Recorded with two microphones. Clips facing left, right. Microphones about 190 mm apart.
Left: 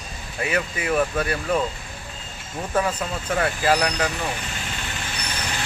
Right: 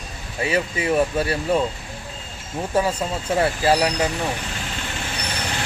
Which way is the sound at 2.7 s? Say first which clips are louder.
Right 2 dB; 30° right (ahead or behind).